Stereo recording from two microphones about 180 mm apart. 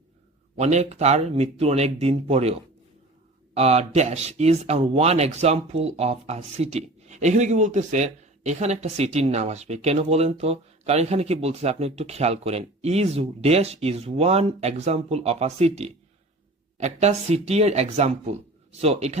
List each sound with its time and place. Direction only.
0.5 s speech: 40° right (ahead or behind)